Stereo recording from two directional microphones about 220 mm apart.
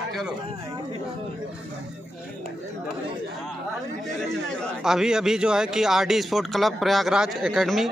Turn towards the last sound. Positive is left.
turn(degrees=0)  # may be behind; listen again after turning